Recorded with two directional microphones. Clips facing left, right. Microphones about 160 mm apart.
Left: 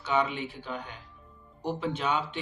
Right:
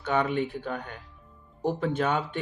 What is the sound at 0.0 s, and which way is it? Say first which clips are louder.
Speech: right 3 dB; 50° right (ahead or behind).